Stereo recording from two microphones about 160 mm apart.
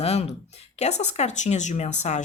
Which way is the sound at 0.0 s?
40° left (ahead or behind).